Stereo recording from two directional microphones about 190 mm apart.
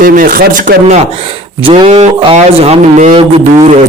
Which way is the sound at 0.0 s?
50° right (ahead or behind).